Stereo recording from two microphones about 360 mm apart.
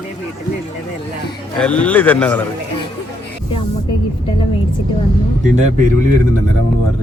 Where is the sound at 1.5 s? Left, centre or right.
Centre.